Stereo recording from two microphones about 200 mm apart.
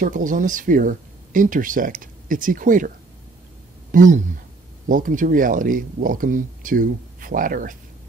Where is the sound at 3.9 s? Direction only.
40° right (ahead or behind).